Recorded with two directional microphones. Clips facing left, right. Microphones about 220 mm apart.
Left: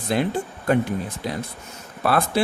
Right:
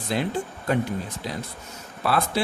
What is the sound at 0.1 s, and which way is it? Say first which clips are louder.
Speech: left 3 dB; 55° left (ahead or behind).